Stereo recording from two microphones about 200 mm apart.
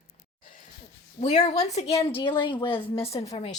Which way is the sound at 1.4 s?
35° left (ahead or behind).